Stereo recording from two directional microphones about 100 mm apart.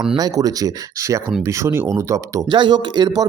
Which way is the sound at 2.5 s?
50° right (ahead or behind).